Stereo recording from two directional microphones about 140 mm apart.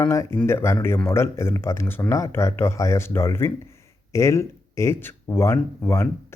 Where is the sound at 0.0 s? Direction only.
20° left (ahead or behind).